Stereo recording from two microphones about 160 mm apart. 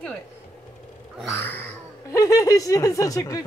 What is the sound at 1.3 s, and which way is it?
Speech, 10° left (ahead or behind).